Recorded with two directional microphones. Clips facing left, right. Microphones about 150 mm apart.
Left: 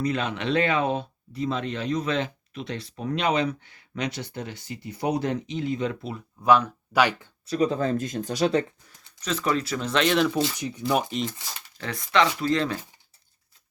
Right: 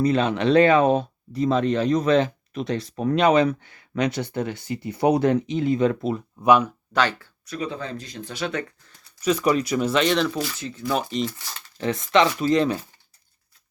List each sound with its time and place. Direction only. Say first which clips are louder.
0.0 s speech: right 7 dB; 30° right (ahead or behind)
2.9 s speech: right 7 dB; 55° right (ahead or behind)
6.4 s speech: right 2 dB; 15° right (ahead or behind)
6.9 s speech: left 1 dB; 10° left (ahead or behind)
7.4 s speech: left 7 dB; 35° left (ahead or behind)
9.2 s speech: right 5 dB; 15° right (ahead or behind); by 10.3 s 5° left (ahead or behind)
10.3 s speech: left 2 dB; 20° left (ahead or behind)
11.8 s speech: right 4 dB; 20° right (ahead or behind)